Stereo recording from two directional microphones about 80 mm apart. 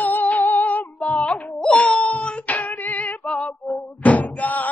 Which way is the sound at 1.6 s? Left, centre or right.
Centre.